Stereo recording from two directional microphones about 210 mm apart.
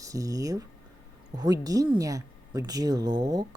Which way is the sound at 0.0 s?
15° right (ahead or behind).